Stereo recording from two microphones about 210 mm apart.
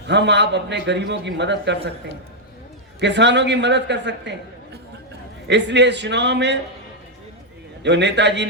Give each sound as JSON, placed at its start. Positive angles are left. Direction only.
{"t": 0.0, "sound": "a man's voice", "side_deg": -55}
{"t": 3.0, "sound": "a man's voice", "side_deg": -55}
{"t": 7.8, "sound": "a man's voice", "side_deg": -55}